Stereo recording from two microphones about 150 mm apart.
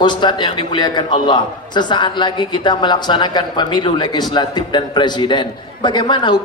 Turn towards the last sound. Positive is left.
turn(degrees=30)  # may be behind; listen again after turning